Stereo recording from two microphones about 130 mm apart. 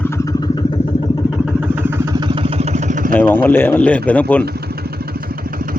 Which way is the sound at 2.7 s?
80° right.